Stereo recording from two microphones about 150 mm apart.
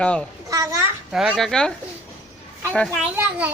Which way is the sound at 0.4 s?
20° right (ahead or behind).